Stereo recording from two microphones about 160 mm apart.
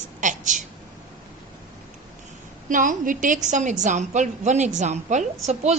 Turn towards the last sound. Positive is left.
turn(degrees=-45)  # may be behind; listen again after turning